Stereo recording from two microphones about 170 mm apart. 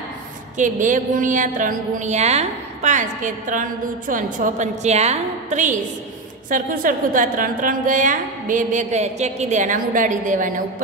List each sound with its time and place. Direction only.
0.6 s a woman's voice: 50° right (ahead or behind)